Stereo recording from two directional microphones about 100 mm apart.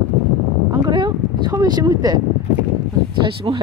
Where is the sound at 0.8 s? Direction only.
50° right (ahead or behind).